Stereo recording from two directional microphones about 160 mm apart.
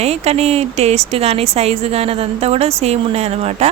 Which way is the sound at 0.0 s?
40° right (ahead or behind).